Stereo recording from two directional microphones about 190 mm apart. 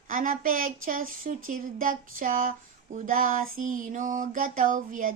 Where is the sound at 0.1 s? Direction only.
45° right (ahead or behind).